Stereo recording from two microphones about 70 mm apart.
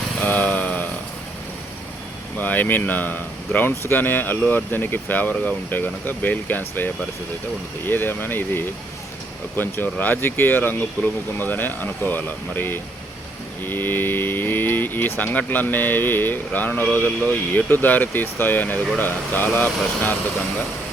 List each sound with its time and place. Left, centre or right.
0.3 s vehicle: left
2.4 s speech: left